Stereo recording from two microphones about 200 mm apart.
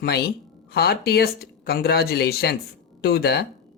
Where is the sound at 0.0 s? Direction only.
50° left (ahead or behind).